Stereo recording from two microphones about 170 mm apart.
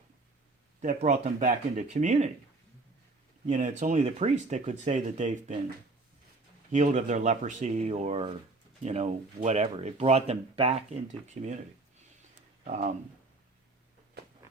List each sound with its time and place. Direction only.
0.8 s speech: 45° right (ahead or behind)
3.4 s speech: 45° right (ahead or behind)
6.7 s speech: 45° right (ahead or behind)
12.6 s speech: 50° right (ahead or behind)